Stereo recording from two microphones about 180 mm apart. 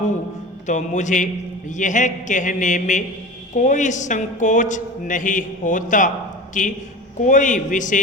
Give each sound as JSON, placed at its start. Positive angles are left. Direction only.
{"t": 0.7, "sound": "a man's voice", "side_deg": 40}